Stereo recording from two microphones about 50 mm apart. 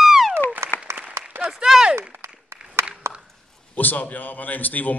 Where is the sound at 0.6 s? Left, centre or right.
Right.